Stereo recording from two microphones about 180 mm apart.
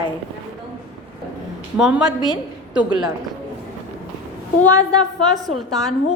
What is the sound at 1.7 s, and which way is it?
Speech, 5° right (ahead or behind).